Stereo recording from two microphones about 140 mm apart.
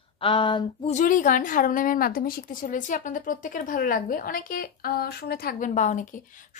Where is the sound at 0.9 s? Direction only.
65° left (ahead or behind).